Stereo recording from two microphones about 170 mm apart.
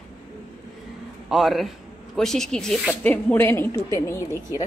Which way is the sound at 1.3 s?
Centre (ahead or behind).